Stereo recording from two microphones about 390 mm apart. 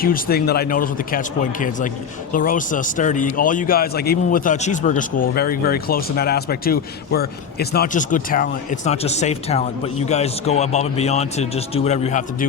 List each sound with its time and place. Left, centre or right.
0.0 s speech: left